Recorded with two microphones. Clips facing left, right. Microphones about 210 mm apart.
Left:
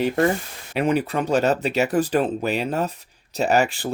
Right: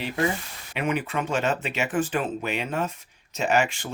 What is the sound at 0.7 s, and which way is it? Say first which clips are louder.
Speech: left 6 dB; 35° left (ahead or behind).